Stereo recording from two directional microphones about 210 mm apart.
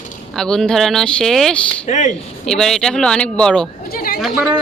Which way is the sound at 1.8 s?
35° left (ahead or behind).